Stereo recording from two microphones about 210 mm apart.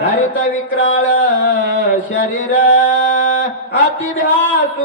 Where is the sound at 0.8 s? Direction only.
65° left (ahead or behind).